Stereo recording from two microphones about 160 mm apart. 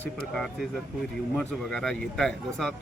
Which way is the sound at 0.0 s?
5° left (ahead or behind).